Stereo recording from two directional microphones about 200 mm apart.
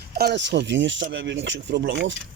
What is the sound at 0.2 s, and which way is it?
Speech, 55° right (ahead or behind).